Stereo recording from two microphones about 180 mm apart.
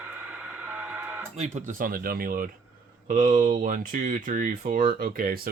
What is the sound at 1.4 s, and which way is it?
Speech, 40° right (ahead or behind).